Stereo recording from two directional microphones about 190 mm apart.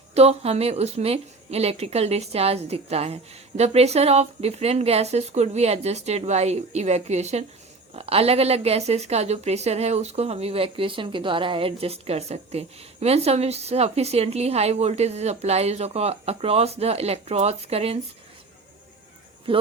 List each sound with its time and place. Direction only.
0.1 s speech: 35° right (ahead or behind)
19.5 s speech: 30° right (ahead or behind)